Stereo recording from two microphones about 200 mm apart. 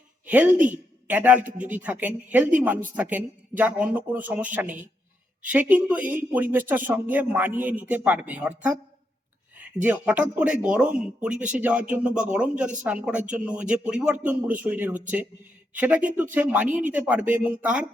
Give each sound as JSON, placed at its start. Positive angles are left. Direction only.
{"t": 0.3, "sound": "speech", "side_deg": -10}
{"t": 1.5, "sound": "speech", "side_deg": -40}
{"t": 1.7, "sound": "speech", "side_deg": -10}
{"t": 9.8, "sound": "speech", "side_deg": -5}